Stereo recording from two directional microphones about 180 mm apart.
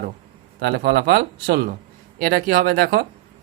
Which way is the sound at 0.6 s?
60° right (ahead or behind).